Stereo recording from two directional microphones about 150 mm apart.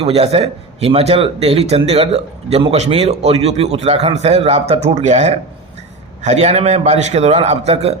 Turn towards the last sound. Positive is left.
turn(degrees=-45)  # may be behind; listen again after turning